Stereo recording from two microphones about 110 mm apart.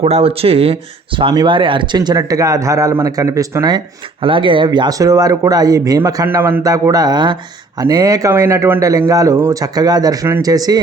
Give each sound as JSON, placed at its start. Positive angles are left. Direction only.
{"t": 0.0, "sound": "speech", "side_deg": -65}
{"t": 6.2, "sound": "speech", "side_deg": -20}